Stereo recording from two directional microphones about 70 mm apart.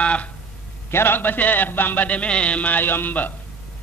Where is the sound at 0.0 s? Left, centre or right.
Centre.